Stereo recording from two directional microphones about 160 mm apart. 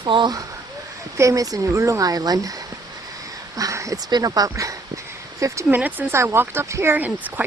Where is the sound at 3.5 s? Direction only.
20° right (ahead or behind).